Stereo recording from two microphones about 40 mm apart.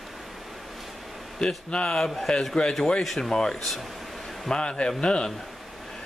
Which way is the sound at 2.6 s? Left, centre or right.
Left.